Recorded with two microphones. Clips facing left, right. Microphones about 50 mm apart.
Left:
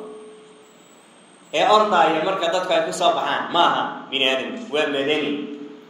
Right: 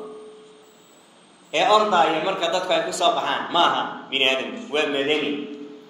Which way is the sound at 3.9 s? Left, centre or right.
Centre.